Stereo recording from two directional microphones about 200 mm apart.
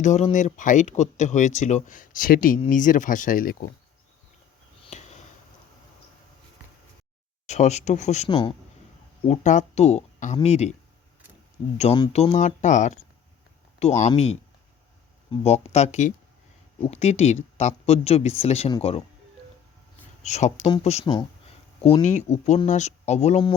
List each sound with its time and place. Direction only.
0.0 s speech: 35° left (ahead or behind)
4.8 s a sound: 35° left (ahead or behind)
7.4 s speech: 35° left (ahead or behind)
11.8 s speech: 25° left (ahead or behind)
15.3 s speech: 30° left (ahead or behind)
20.2 s speech: 35° left (ahead or behind)